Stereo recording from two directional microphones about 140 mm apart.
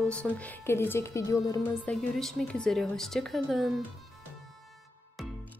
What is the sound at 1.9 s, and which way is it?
A woman's voice, 5° left (ahead or behind).